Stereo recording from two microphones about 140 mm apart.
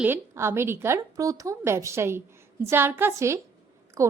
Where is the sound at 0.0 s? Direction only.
15° right (ahead or behind).